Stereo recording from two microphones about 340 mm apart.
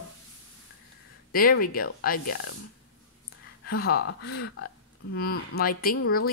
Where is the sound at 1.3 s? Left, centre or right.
Left.